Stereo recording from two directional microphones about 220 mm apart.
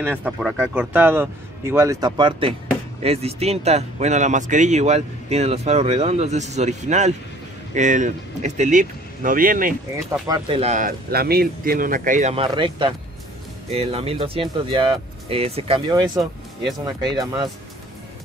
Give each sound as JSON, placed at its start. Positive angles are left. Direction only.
{"t": 0.0, "sound": "speech", "side_deg": -10}
{"t": 10.2, "sound": "speech", "side_deg": -20}